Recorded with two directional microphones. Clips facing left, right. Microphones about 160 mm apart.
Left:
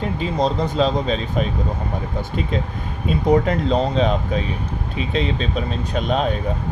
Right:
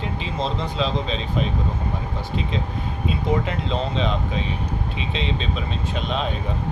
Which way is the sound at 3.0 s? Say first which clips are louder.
Left 7 dB; 40° left (ahead or behind).